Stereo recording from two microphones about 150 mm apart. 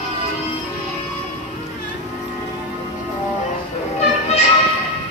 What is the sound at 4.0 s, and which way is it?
Children playing, 45° left (ahead or behind).